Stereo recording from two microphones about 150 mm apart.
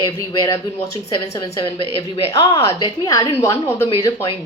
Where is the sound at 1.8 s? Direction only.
35° left (ahead or behind).